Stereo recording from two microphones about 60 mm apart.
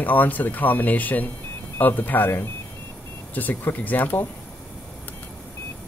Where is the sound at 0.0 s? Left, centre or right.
Left.